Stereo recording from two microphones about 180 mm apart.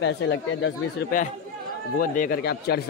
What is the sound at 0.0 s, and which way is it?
Speech, 90° left.